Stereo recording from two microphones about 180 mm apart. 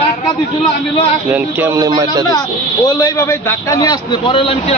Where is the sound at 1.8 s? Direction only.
20° right (ahead or behind).